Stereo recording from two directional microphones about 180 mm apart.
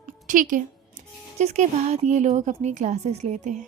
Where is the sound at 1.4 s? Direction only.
35° right (ahead or behind).